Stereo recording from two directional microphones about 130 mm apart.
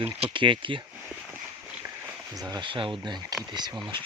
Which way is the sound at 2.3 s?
30° right (ahead or behind).